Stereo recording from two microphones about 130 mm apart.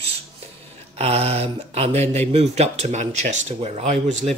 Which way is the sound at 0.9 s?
50° right (ahead or behind).